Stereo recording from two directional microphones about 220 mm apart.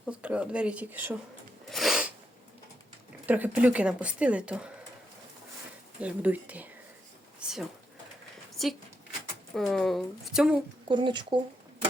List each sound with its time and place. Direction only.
0.0 s speech: 5° right (ahead or behind)
1.7 s sneeze: centre (ahead or behind)
3.2 s a woman's voice: 5° right (ahead or behind)
6.0 s a woman's voice: 5° right (ahead or behind)
10.8 s speech: 20° right (ahead or behind)